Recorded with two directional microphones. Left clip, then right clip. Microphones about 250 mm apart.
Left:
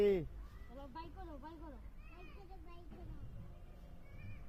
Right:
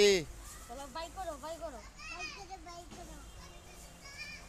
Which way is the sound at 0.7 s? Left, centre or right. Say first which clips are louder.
Right 9 dB; right.